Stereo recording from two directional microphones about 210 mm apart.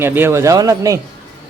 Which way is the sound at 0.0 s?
10° right (ahead or behind).